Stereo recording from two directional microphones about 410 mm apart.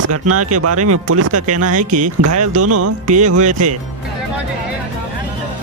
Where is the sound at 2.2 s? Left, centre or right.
Right.